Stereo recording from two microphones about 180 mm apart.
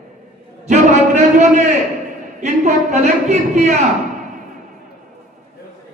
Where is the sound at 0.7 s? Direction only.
40° right (ahead or behind).